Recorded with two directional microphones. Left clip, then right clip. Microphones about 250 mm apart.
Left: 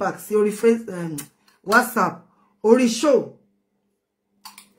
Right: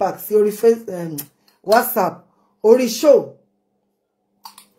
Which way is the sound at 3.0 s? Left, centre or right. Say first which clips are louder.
Right 6 dB; centre.